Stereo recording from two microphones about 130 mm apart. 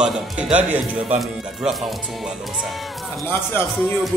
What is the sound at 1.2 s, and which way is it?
Speech, centre (ahead or behind).